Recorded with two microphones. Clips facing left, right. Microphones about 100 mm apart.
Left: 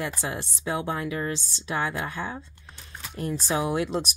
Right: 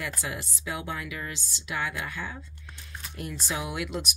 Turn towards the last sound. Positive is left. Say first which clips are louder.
# left 7 dB
turn(degrees=35)  # may be behind; listen again after turning